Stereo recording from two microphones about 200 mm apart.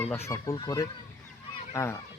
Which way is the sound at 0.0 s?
10° left (ahead or behind).